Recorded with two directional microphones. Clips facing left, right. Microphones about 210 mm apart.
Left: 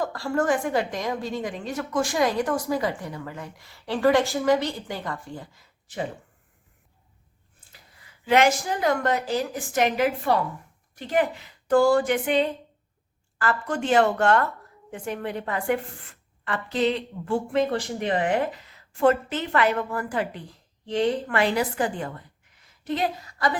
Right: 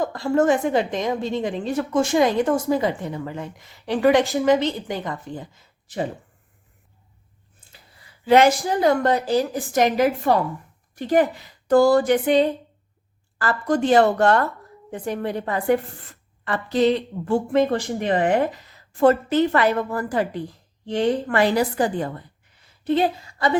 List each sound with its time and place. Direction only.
0.0 s a woman's voice: 20° right (ahead or behind)
7.7 s a woman's voice: 30° right (ahead or behind)